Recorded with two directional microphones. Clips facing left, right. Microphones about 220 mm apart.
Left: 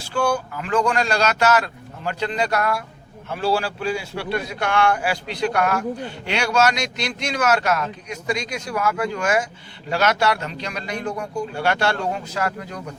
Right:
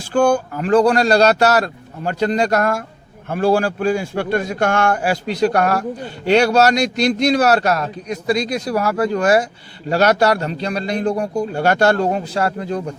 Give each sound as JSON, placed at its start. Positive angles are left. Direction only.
{"t": 0.1, "sound": "a man's voice", "side_deg": -50}